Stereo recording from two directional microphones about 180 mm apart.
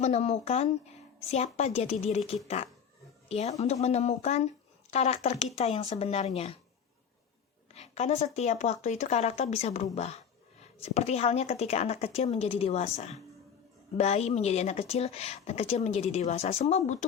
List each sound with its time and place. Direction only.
0.0 s a woman's voice: 35° left (ahead or behind)
7.7 s a woman's voice: 35° left (ahead or behind)